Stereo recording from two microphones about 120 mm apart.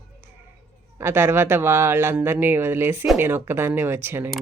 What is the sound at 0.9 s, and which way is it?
Speech, 20° right (ahead or behind).